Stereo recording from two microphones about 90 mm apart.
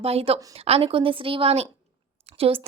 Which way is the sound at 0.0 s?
90° right.